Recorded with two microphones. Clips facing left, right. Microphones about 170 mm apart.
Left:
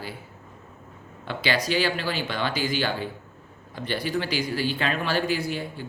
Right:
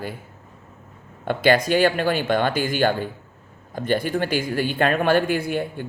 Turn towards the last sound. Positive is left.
turn(degrees=-55)  # may be behind; listen again after turning